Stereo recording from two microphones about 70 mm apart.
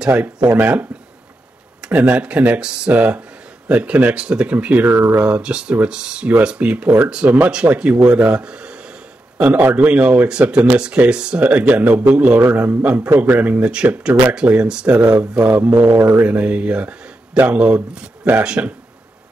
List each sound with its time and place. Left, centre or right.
0.0 s speech: right
4.8 s speech: right
5.1 s speech: centre
12.8 s speech: centre